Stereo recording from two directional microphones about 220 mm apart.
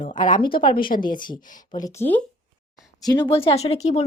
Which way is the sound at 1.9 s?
10° left (ahead or behind).